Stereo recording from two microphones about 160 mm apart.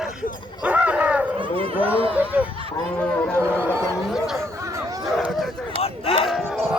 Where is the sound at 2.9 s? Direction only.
10° left (ahead or behind).